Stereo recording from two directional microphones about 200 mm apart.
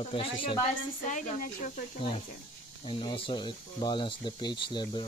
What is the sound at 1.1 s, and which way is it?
Speech, 40° left (ahead or behind).